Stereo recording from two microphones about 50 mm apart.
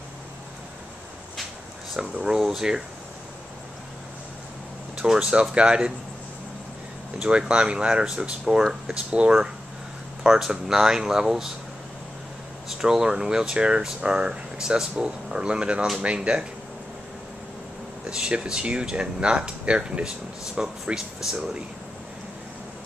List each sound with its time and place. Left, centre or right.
2.0 s speech: centre
4.9 s speech: centre
7.2 s speech: right
12.7 s speech: centre
18.1 s speech: centre